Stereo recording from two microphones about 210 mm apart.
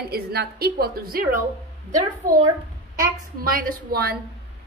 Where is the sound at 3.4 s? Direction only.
45° right (ahead or behind).